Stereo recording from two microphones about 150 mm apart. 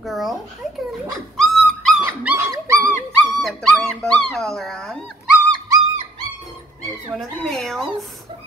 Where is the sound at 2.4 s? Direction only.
15° right (ahead or behind).